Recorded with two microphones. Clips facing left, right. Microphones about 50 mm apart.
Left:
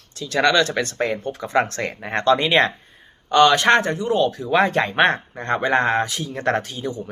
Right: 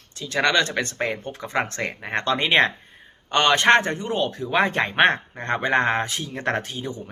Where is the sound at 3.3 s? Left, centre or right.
Right.